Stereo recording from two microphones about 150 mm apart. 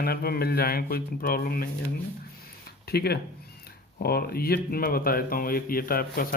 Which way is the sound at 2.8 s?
90° left.